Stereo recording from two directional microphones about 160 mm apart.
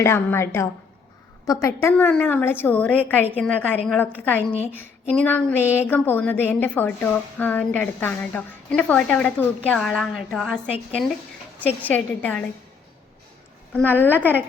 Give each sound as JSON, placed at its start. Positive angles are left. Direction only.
{"t": 0.0, "sound": "a woman's voice", "side_deg": 15}
{"t": 14.2, "sound": "a woman's voice", "side_deg": -10}